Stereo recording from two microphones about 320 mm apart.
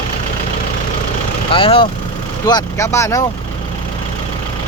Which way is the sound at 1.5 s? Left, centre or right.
Centre.